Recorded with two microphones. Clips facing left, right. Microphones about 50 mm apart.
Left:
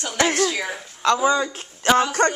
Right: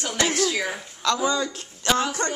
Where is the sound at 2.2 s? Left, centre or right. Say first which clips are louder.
Left 8 dB; left.